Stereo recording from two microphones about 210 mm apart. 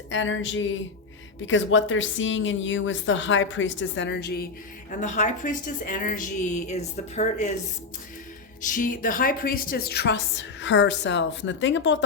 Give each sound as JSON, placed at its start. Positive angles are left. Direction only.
{"t": 0.1, "sound": "a woman's voice", "side_deg": 65}
{"t": 4.9, "sound": "a woman's voice", "side_deg": 35}
{"t": 8.6, "sound": "a woman's voice", "side_deg": 40}